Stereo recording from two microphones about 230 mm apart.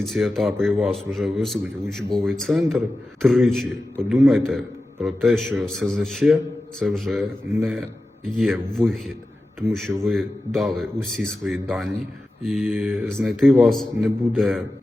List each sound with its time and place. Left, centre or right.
0.0 s a man's voice: centre